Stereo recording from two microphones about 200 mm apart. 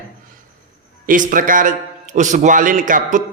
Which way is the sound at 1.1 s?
40° right (ahead or behind).